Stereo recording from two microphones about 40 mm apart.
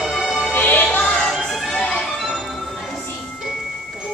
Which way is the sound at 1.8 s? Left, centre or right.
Left.